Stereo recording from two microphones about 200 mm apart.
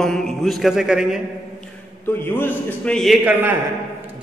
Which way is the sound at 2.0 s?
10° left (ahead or behind).